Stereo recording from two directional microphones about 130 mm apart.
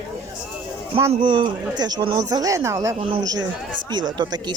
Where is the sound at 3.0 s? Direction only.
40° right (ahead or behind).